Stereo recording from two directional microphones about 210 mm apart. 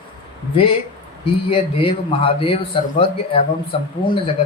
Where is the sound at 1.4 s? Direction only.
25° left (ahead or behind).